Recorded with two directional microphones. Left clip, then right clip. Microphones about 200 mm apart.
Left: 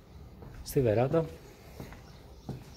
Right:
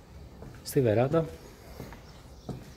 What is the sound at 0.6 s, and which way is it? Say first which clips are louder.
Speech: right 2 dB; 5° right (ahead or behind).